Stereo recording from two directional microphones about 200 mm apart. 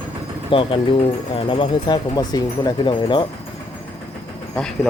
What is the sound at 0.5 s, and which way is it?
Speech, 25° left (ahead or behind).